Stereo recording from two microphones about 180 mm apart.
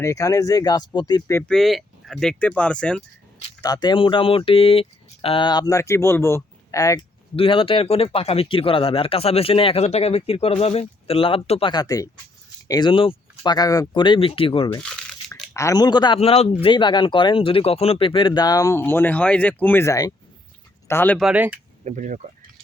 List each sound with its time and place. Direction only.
0.0 s speech: 15° left (ahead or behind)
1.5 s speech: centre (ahead or behind)
3.6 s speech: 25° left (ahead or behind)
7.3 s speech: 30° left (ahead or behind)
11.7 s speech: 20° left (ahead or behind)
14.8 s crumpling: 5° left (ahead or behind)
15.5 s speech: 20° left (ahead or behind)
21.2 s speech: 10° right (ahead or behind)
21.8 s speech: 45° right (ahead or behind)